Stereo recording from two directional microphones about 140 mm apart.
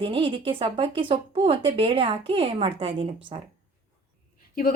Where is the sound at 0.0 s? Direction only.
40° right (ahead or behind).